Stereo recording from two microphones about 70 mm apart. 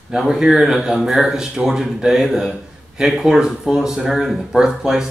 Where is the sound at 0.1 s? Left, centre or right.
Centre.